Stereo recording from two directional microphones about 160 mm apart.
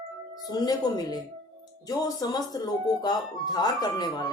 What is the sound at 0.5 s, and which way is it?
Speech, 25° left (ahead or behind).